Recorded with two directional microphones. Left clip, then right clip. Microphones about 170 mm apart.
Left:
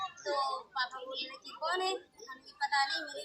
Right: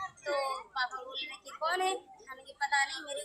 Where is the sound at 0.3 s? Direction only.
Centre (ahead or behind).